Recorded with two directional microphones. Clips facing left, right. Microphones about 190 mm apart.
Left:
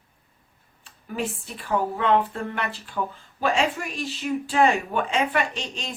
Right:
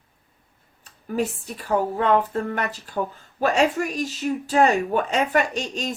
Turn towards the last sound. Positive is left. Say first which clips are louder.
# right 4 dB
turn(degrees=-45)  # may be behind; listen again after turning